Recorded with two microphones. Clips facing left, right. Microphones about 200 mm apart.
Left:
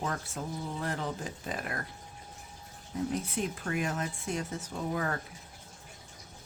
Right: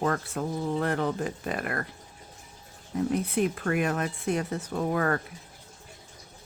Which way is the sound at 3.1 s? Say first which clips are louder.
Right 7 dB; 60° right (ahead or behind).